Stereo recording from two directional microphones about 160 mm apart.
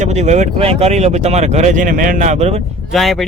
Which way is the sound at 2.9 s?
Centre (ahead or behind).